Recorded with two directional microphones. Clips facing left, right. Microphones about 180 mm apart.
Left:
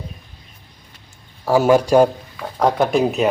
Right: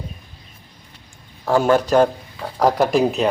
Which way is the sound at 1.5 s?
10° left (ahead or behind).